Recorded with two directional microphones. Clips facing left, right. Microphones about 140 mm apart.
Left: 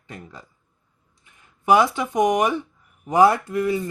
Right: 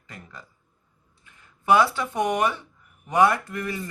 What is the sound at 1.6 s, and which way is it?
Speech, 20° left (ahead or behind).